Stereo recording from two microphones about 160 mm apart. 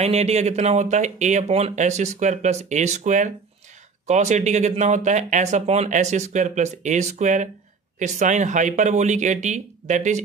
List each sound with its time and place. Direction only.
0.0 s speech: 40° right (ahead or behind)